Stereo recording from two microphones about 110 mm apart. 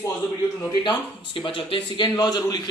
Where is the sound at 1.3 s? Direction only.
50° left (ahead or behind).